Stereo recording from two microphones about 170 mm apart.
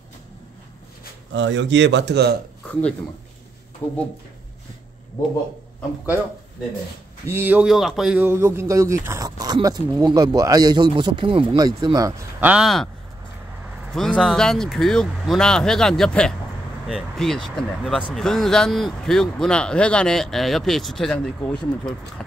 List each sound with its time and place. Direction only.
1.3 s speech: 90° right
2.6 s speech: 5° left (ahead or behind)
7.2 s speech: 10° right (ahead or behind)
13.9 s speech: 5° left (ahead or behind)